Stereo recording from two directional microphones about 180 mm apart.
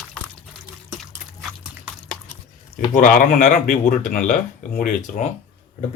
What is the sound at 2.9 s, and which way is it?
Speech, 50° left (ahead or behind).